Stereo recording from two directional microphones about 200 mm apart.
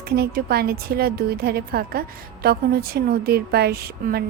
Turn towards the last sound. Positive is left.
turn(degrees=-50)  # may be behind; listen again after turning